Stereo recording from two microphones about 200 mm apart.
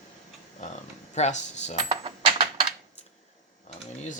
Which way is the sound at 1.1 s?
35° left (ahead or behind).